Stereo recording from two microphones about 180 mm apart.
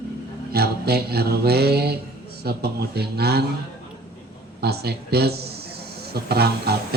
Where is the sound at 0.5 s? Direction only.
60° right (ahead or behind).